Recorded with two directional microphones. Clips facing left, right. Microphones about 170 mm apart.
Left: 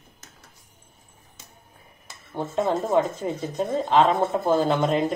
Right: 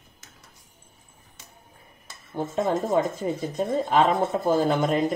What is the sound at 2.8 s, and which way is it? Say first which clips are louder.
Speech: left 1 dB; centre (ahead or behind).